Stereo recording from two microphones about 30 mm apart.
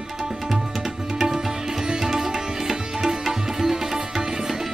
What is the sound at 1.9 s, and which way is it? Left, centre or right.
Music, centre.